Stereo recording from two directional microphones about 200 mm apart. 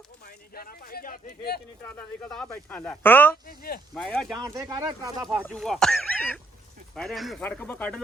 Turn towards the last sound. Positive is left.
turn(degrees=5)  # may be behind; listen again after turning